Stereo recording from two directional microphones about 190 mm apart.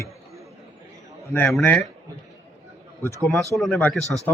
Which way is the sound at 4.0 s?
15° right (ahead or behind).